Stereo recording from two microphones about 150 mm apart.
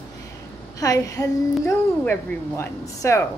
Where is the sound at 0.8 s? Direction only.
25° left (ahead or behind).